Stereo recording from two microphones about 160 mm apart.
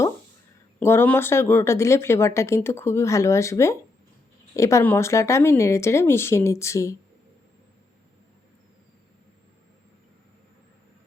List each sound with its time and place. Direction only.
0.8 s speech: 15° left (ahead or behind)